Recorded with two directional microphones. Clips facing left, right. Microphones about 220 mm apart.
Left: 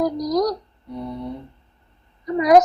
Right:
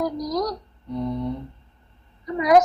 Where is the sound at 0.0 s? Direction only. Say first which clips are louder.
Left 5 dB; 40° left (ahead or behind).